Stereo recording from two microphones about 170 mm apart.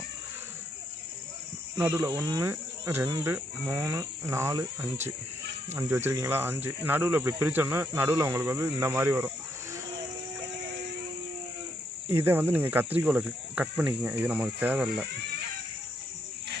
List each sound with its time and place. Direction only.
1.8 s speech: 20° right (ahead or behind)
12.0 s speech: 10° right (ahead or behind)